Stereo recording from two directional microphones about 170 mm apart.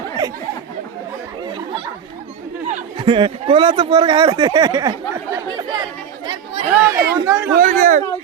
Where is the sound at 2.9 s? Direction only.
30° right (ahead or behind).